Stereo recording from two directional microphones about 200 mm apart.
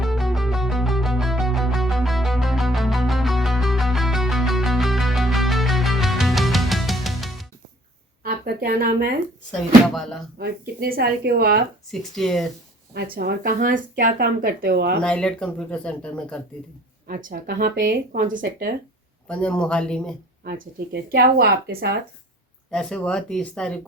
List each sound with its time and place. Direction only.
0.0 s music: centre (ahead or behind)
8.2 s a sound: 50° right (ahead or behind)
9.9 s speech: centre (ahead or behind)
10.3 s speech: 50° right (ahead or behind)
11.9 s speech: centre (ahead or behind)
12.9 s speech: 55° right (ahead or behind)
15.0 s speech: 5° left (ahead or behind)
17.1 s speech: 45° right (ahead or behind)
19.3 s speech: 5° left (ahead or behind)
20.4 s speech: 50° right (ahead or behind)
22.7 s speech: 5° left (ahead or behind)